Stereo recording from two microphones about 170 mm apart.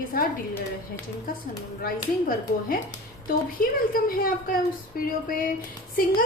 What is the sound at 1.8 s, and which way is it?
A woman's voice, 55° left (ahead or behind).